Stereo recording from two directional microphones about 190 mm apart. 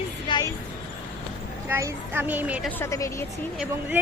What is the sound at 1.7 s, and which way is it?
A woman's voice, 15° right (ahead or behind).